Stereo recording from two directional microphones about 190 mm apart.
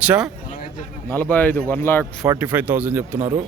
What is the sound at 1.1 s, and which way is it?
Speech, 10° left (ahead or behind).